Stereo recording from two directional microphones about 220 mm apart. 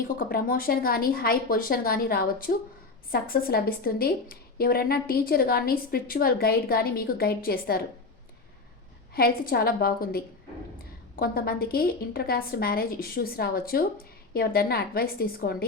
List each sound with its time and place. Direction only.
0.2 s a woman's voice: 40° left (ahead or behind)
9.1 s a woman's voice: 45° left (ahead or behind)